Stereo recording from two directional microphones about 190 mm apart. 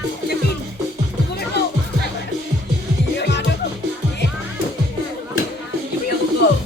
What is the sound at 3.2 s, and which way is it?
Music, 65° left (ahead or behind).